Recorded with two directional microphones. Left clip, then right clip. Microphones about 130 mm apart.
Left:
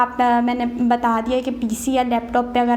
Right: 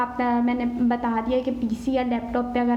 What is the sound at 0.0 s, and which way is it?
A woman's voice, 20° left (ahead or behind).